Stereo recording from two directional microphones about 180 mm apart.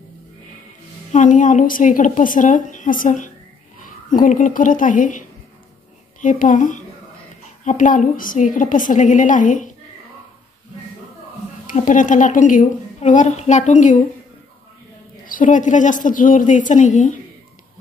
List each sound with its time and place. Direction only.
1.1 s a woman's voice: 45° left (ahead or behind)
6.2 s a woman's voice: 45° left (ahead or behind)
11.6 s a woman's voice: 45° left (ahead or behind)
15.2 s a woman's voice: 45° left (ahead or behind)